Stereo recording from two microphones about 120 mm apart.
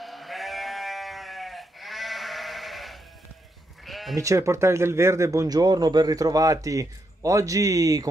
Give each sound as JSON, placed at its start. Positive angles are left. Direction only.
{"t": 0.0, "sound": "sheep", "side_deg": 0}
{"t": 4.1, "sound": "speech", "side_deg": -25}